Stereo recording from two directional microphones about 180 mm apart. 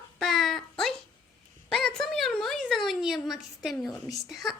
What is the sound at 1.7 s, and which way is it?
A woman's voice, 5° left (ahead or behind).